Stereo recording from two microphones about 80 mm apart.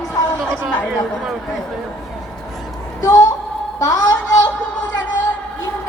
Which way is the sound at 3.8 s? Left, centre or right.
Left.